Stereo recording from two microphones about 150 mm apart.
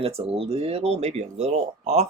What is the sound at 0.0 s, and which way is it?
Speech, 40° right (ahead or behind).